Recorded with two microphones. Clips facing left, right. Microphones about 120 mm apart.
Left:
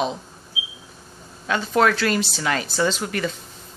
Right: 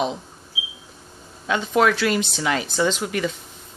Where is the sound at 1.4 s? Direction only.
15° right (ahead or behind).